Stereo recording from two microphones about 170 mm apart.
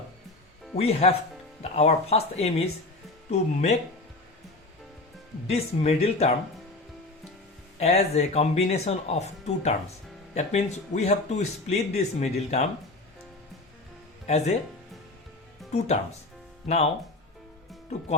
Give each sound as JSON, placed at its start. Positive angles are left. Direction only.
{"t": 0.8, "sound": "speech", "side_deg": 35}
{"t": 5.5, "sound": "speech", "side_deg": 35}
{"t": 7.8, "sound": "speech", "side_deg": 40}
{"t": 14.3, "sound": "speech", "side_deg": 40}
{"t": 16.6, "sound": "speech", "side_deg": 40}